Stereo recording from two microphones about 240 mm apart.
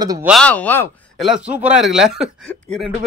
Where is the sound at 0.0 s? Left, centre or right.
Centre.